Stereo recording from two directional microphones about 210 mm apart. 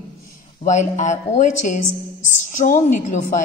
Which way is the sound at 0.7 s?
35° left (ahead or behind).